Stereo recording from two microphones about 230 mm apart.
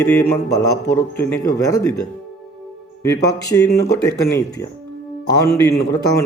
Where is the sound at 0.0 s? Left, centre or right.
Centre.